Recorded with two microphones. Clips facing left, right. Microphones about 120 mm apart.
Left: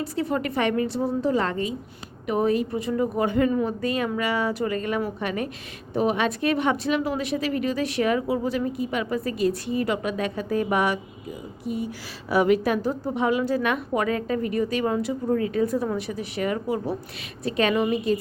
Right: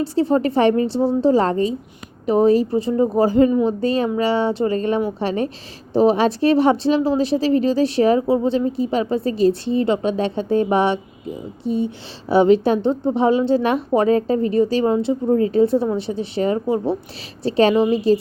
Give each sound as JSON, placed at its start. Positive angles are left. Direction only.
{"t": 0.0, "sound": "a woman's voice", "side_deg": -30}